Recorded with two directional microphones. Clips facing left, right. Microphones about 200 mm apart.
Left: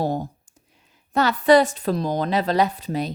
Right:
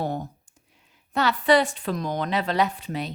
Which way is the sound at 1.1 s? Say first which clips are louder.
Left 4 dB; 40° left (ahead or behind).